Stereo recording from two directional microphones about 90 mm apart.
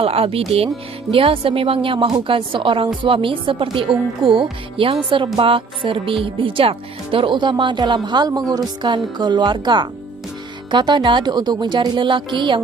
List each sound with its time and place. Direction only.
0.0 s a woman's voice: 90° right
2.2 s a woman's voice: 75° right (ahead or behind); by 8.3 s 55° right (ahead or behind)
8.3 s a woman's voice: 45° right (ahead or behind); by 12.6 s 65° right (ahead or behind)